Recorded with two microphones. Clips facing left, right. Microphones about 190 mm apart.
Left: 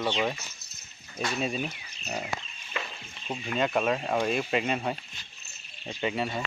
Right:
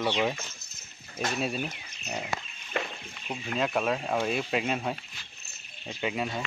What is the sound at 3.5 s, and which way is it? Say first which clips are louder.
Speech: left 1 dB; centre (ahead or behind).